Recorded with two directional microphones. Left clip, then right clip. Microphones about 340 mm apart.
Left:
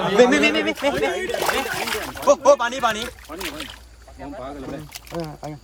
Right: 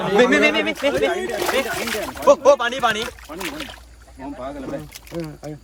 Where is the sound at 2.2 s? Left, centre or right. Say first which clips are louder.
Right 2 dB; centre.